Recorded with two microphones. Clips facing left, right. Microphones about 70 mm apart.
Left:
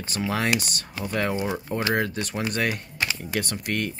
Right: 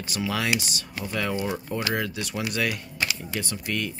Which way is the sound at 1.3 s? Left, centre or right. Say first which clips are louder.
Left 1 dB; left.